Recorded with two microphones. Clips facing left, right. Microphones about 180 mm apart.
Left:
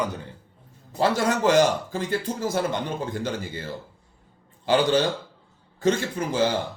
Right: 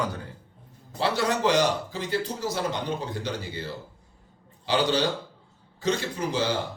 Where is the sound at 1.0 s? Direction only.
45° left (ahead or behind).